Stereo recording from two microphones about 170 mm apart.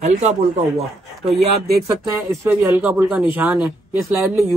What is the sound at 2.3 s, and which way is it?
Speech, 10° right (ahead or behind).